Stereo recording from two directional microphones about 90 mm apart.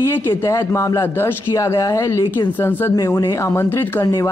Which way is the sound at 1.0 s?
25° left (ahead or behind).